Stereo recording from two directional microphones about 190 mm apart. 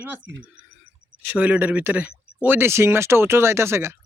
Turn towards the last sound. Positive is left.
turn(degrees=-15)  # may be behind; listen again after turning